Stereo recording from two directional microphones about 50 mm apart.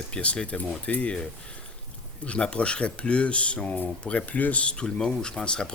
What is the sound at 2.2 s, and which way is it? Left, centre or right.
Speech, left.